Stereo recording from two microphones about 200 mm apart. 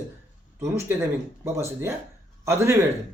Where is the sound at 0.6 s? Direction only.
15° right (ahead or behind).